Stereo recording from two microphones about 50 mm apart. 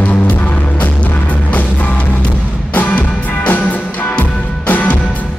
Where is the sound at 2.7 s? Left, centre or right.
Left.